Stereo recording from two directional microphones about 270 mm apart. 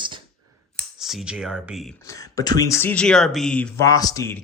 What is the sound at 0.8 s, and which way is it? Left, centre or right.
Speech, centre.